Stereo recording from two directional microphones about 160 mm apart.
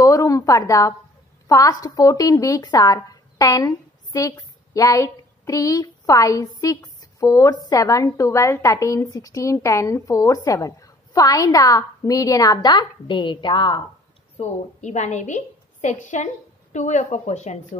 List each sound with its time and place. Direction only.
0.0 s a sound: 20° left (ahead or behind)
1.5 s a woman's voice: 20° left (ahead or behind)
14.3 s a woman's voice: 45° left (ahead or behind)